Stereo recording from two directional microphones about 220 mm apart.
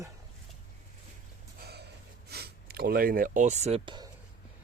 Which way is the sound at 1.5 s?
45° right (ahead or behind).